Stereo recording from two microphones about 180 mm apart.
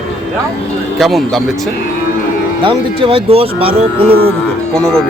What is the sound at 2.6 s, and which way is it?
Speech, 30° right (ahead or behind).